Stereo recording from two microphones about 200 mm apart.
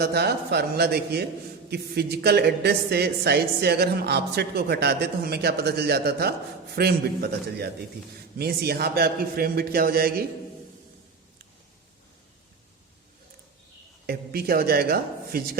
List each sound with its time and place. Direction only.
0.0 s a woman's voice: 55° right (ahead or behind)
14.1 s a woman's voice: 50° right (ahead or behind)